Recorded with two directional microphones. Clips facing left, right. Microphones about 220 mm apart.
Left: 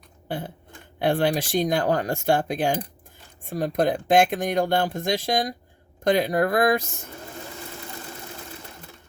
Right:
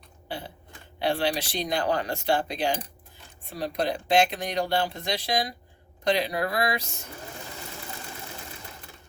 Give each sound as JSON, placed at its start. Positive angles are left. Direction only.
{"t": 0.3, "sound": "speech", "side_deg": 50}